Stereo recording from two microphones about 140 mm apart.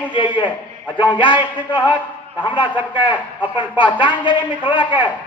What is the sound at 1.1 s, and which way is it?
A man's voice, 35° left (ahead or behind).